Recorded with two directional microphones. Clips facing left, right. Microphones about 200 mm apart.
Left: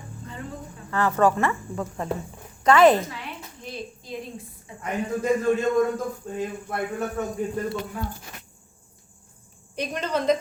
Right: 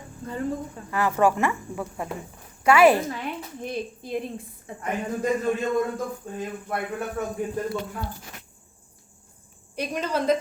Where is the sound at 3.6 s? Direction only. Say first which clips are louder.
Right 4 dB; 55° right (ahead or behind).